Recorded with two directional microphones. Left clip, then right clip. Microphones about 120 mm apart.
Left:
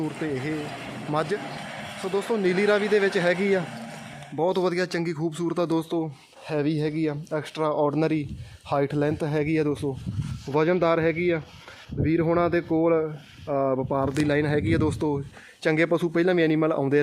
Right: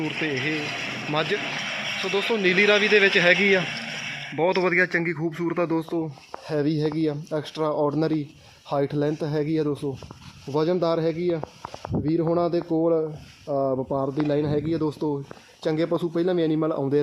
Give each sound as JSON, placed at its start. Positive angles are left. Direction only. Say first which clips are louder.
{"t": 1.1, "sound": "speech", "louder": "right 1 dB", "side_deg": 25}
{"t": 6.5, "sound": "speech", "louder": "right 1 dB", "side_deg": 0}
{"t": 12.4, "sound": "speech", "louder": "even", "side_deg": 40}
{"t": 12.8, "sound": "speech", "louder": "even", "side_deg": 20}